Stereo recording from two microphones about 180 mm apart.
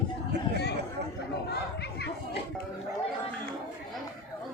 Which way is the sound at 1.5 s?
65° left (ahead or behind).